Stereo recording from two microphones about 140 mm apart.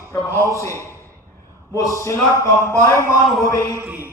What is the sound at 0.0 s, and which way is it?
A man's voice, 20° left (ahead or behind).